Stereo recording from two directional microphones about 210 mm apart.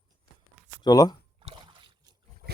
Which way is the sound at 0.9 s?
15° left (ahead or behind).